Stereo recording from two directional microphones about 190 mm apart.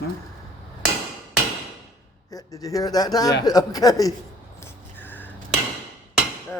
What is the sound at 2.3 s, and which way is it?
Speech, 20° left (ahead or behind).